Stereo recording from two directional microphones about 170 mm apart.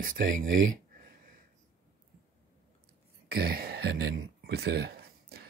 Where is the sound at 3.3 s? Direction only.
65° right (ahead or behind).